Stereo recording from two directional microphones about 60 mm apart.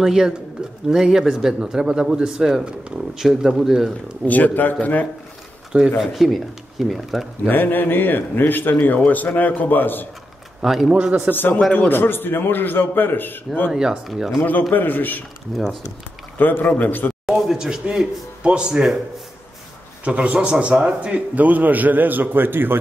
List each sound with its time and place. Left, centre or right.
0.0 s speech: centre
4.3 s speech: left
5.7 s speech: centre
7.4 s a man's voice: left
10.6 s speech: centre
11.3 s a man's voice: left
13.7 s speech: centre
14.7 s a man's voice: left
15.5 s speech: centre
16.3 s a man's voice: left
17.3 s speech: centre
20.1 s a man's voice: centre; by 22.8 s right